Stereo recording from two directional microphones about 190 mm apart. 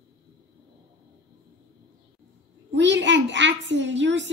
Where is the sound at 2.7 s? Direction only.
70° right (ahead or behind).